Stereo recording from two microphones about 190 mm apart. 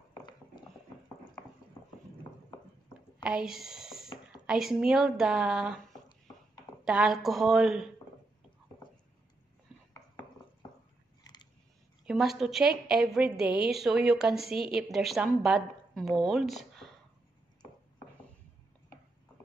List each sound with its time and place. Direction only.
0.1 s a sound: 25° left (ahead or behind)
3.3 s a woman's voice: 5° right (ahead or behind)
6.8 s a woman's voice: 5° right (ahead or behind)
12.0 s a woman's voice: centre (ahead or behind)